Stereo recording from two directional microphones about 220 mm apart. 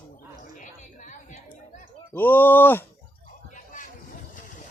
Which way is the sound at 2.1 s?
10° left (ahead or behind).